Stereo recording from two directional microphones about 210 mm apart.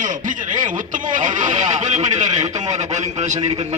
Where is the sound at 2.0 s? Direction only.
20° right (ahead or behind).